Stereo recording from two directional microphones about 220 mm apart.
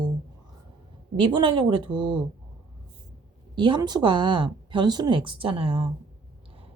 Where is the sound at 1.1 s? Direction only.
20° right (ahead or behind).